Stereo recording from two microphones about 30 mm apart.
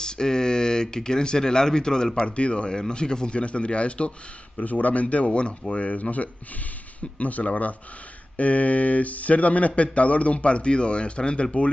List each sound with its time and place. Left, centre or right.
0.0 s speech: left
2.2 s speech: left
2.7 s speech: left
4.6 s a man's voice: left
5.1 s speech: left
5.9 s a man's voice: left